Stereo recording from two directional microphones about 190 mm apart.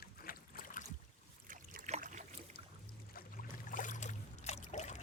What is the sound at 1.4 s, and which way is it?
Boat, 45° right (ahead or behind).